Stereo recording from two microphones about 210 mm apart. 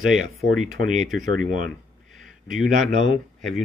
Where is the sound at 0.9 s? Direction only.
Centre (ahead or behind).